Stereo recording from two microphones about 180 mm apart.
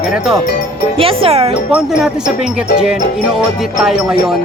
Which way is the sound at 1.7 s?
5° right (ahead or behind).